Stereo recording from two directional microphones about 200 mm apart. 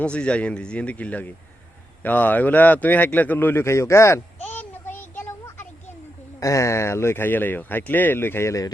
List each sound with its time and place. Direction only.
0.0 s a man's voice: 5° left (ahead or behind)